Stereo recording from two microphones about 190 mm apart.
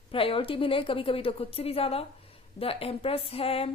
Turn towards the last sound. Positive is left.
turn(degrees=30)  # may be behind; listen again after turning